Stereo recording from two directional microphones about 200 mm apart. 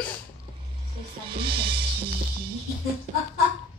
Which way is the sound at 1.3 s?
25° right (ahead or behind).